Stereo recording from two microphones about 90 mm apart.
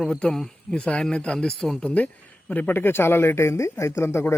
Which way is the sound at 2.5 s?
20° left (ahead or behind).